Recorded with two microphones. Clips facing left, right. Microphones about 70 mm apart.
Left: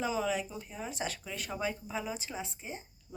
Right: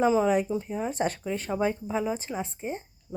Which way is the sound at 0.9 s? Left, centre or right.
Right.